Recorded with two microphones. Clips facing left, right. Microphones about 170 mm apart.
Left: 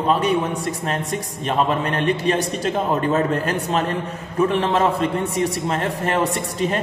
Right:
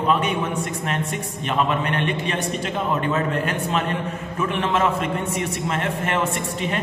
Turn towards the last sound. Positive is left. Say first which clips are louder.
# left 3 dB
turn(degrees=35)  # may be behind; listen again after turning